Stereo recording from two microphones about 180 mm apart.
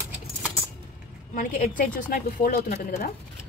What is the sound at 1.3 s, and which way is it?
A woman's voice, 45° left (ahead or behind).